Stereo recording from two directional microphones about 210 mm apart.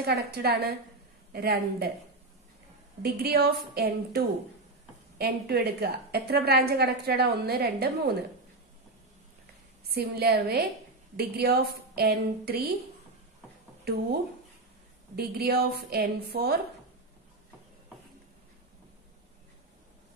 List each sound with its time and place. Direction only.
0.0 s a woman's voice: 50° right (ahead or behind)
3.0 s a woman's voice: 50° right (ahead or behind)
5.2 s a woman's voice: 50° right (ahead or behind)
9.9 s a woman's voice: 50° right (ahead or behind)
13.9 s speech: 45° right (ahead or behind)
15.1 s a woman's voice: 50° right (ahead or behind)